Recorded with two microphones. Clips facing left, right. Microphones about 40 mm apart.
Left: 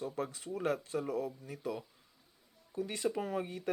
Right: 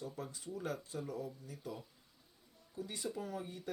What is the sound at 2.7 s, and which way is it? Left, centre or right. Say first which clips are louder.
Speech: left 7 dB; left.